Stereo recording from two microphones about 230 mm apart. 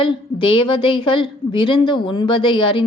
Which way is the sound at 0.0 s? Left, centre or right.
Left.